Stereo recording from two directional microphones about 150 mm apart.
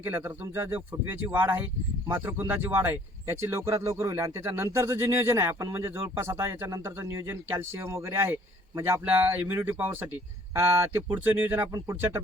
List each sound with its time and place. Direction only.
0.0 s speech: 15° right (ahead or behind)